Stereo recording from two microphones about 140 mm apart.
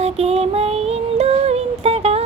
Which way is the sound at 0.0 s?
50° right (ahead or behind).